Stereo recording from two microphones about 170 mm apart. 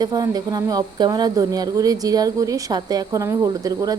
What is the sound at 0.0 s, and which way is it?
A woman's voice, 25° right (ahead or behind).